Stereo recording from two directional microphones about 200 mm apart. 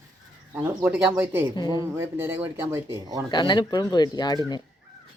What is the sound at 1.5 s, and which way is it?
Speech, 20° left (ahead or behind).